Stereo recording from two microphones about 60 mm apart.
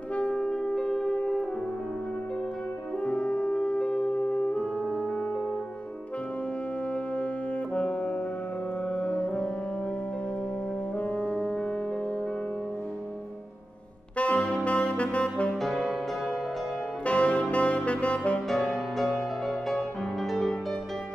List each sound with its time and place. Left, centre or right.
0.1 s brass instrument: centre
3.0 s music: centre
7.7 s saxophone: left
8.8 s music: left
11.0 s music: left
14.1 s saxophone: centre
15.6 s music: centre
17.0 s saxophone: centre
18.5 s music: centre